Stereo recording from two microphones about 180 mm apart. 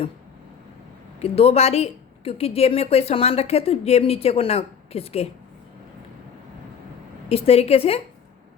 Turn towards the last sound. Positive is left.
turn(degrees=35)  # may be behind; listen again after turning